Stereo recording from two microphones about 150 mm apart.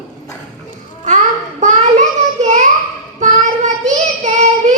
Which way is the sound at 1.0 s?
55° right (ahead or behind).